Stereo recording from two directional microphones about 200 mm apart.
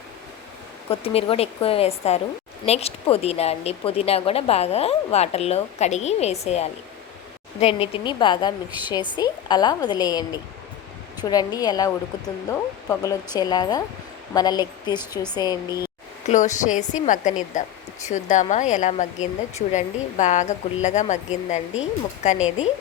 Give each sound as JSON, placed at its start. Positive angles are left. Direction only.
{"t": 0.9, "sound": "a woman's voice", "side_deg": 30}
{"t": 16.2, "sound": "speech", "side_deg": 35}
{"t": 22.4, "sound": "speech", "side_deg": -5}